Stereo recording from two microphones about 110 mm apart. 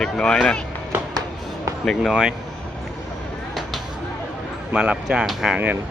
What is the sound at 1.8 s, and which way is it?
Speech, centre (ahead or behind).